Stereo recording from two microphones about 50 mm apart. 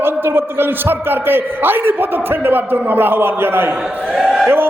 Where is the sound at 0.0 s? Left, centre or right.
Right.